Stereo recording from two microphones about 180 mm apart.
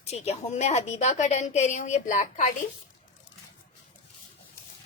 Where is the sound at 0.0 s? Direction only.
35° left (ahead or behind).